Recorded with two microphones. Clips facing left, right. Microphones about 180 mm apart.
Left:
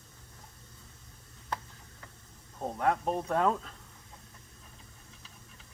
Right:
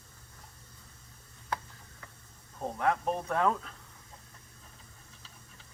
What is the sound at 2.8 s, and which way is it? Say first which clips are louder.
Speech: left 1 dB; 20° left (ahead or behind).